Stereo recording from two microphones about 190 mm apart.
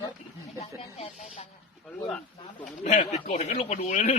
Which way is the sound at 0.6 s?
35° left (ahead or behind).